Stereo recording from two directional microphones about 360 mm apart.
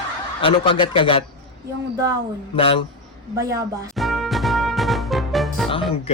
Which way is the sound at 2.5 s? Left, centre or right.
Centre.